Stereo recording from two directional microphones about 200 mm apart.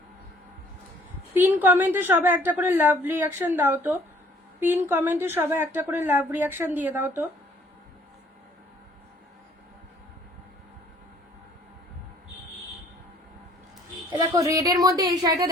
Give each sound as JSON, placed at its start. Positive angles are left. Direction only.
{"t": 1.3, "sound": "a woman's voice", "side_deg": -10}
{"t": 14.3, "sound": "speech", "side_deg": -15}